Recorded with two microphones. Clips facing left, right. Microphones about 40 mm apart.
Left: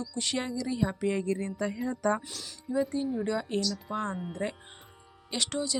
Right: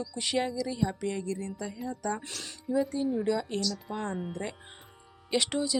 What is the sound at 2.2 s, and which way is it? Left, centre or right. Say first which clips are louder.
Speech: right 2 dB; right.